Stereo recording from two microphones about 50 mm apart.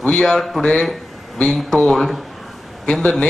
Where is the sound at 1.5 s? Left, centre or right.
Centre.